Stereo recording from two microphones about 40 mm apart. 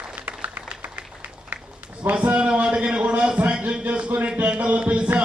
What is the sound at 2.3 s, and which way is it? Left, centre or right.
A man's voice, right.